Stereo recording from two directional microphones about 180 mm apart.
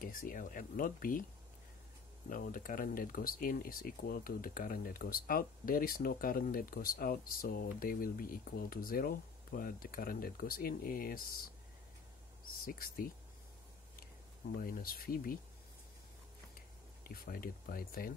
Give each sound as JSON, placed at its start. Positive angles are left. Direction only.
{"t": 0.0, "sound": "speech", "side_deg": 50}
{"t": 2.2, "sound": "speech", "side_deg": 50}
{"t": 12.6, "sound": "speech", "side_deg": 55}
{"t": 14.6, "sound": "speech", "side_deg": 55}
{"t": 17.0, "sound": "speech", "side_deg": 55}